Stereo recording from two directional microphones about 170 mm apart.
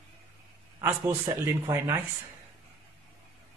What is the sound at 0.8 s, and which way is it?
Speech, 15° right (ahead or behind).